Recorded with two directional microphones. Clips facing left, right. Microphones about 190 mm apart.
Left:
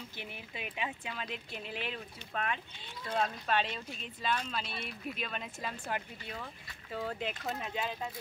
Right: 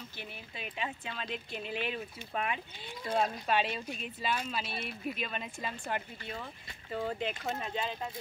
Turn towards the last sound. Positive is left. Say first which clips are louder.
# right 1 dB
turn(degrees=5)  # may be behind; listen again after turning